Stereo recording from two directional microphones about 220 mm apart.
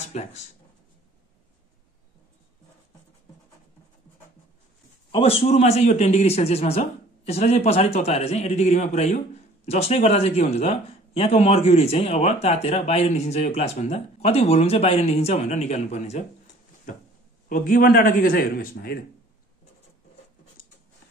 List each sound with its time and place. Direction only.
0.1 s speech: 30° left (ahead or behind)
5.1 s speech: 25° left (ahead or behind)
17.5 s a man's voice: 40° left (ahead or behind)